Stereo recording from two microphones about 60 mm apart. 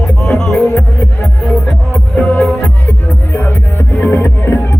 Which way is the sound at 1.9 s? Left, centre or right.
Centre.